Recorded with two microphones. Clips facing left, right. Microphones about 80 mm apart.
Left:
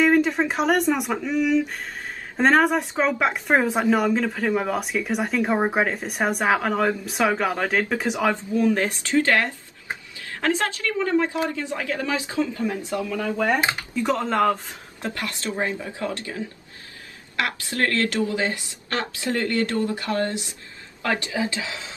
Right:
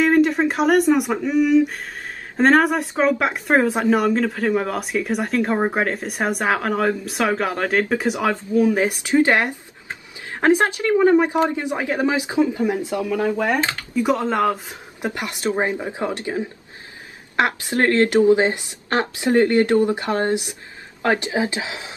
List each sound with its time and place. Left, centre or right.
0.0 s a woman's voice: centre
13.6 s speech: centre
13.9 s a woman's voice: centre